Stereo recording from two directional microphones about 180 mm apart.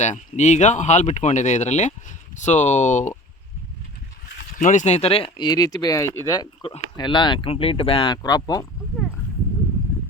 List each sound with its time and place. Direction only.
0.0 s speech: 40° left (ahead or behind)
4.6 s speech: 45° left (ahead or behind); by 8.6 s 20° left (ahead or behind)